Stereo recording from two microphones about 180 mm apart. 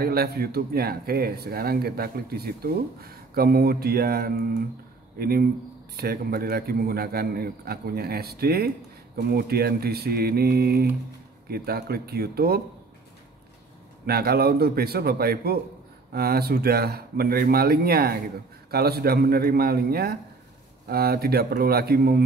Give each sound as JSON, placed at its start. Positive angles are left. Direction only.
{"t": 0.0, "sound": "a man's voice", "side_deg": -60}
{"t": 14.0, "sound": "a man's voice", "side_deg": -60}